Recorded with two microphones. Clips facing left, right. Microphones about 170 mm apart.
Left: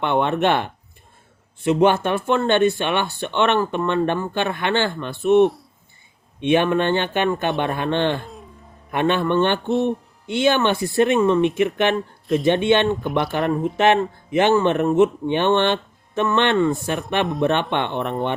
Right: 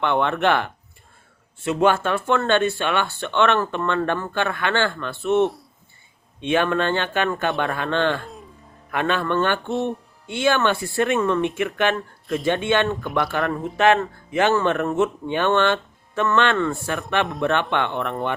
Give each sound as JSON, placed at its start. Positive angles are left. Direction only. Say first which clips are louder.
{"t": 0.0, "sound": "speech", "louder": "left 1 dB", "side_deg": 20}